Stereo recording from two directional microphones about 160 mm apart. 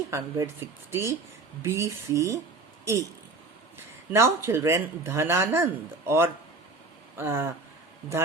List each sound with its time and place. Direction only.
0.1 s speech: 15° right (ahead or behind)
4.1 s speech: 15° right (ahead or behind)